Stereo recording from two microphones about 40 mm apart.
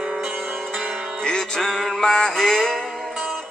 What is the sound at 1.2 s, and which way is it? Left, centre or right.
Music, centre.